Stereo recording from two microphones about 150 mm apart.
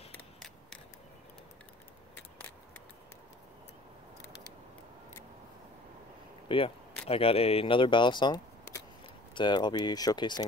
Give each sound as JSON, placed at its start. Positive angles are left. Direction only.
{"t": 6.5, "sound": "speech", "side_deg": 35}